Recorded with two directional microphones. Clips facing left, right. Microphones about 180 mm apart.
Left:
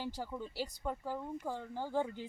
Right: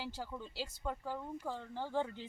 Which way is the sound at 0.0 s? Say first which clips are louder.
Left 3 dB; 15° left (ahead or behind).